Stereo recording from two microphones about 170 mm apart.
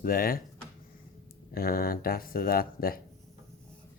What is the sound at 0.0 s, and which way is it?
Speech, 60° left (ahead or behind).